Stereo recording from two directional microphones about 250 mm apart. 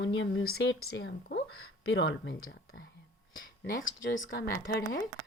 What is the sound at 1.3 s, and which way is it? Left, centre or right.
Speech, left.